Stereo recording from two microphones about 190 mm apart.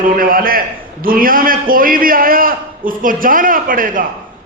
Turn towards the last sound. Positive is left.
turn(degrees=-45)  # may be behind; listen again after turning